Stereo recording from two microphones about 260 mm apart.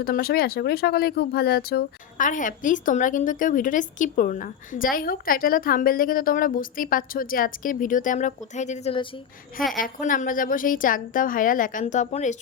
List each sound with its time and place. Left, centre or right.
0.0 s speech: left